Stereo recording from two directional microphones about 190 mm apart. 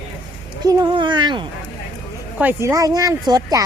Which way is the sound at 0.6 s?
20° right (ahead or behind).